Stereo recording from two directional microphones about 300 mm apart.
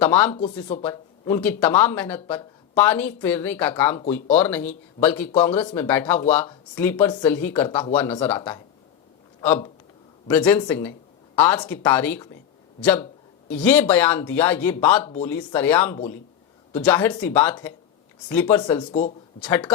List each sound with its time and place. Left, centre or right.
0.0 s speech: centre
0.3 s speech: left
0.9 s speech: centre
10.2 s speech: centre
19.4 s speech: centre